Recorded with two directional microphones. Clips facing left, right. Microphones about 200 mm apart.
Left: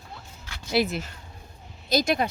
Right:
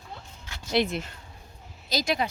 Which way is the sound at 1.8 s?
50° left (ahead or behind).